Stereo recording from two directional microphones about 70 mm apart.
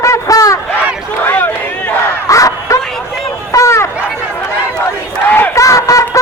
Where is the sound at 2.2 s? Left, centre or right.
Left.